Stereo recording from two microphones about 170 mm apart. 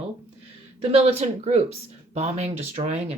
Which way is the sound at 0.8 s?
35° right (ahead or behind).